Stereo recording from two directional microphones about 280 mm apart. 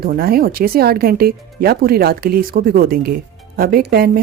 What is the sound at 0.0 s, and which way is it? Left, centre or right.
A woman's voice, right.